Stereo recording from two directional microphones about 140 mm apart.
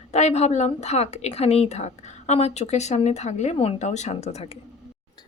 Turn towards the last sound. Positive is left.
turn(degrees=50)  # may be behind; listen again after turning